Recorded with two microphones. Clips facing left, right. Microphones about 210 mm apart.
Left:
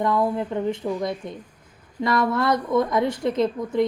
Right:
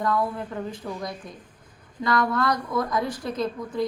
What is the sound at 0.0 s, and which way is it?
A woman's voice, 25° left (ahead or behind).